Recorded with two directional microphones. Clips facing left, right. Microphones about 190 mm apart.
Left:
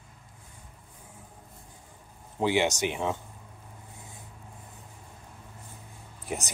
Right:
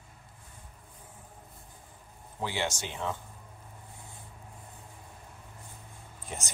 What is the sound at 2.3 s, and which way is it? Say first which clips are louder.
Speech: left 8 dB; 20° left (ahead or behind).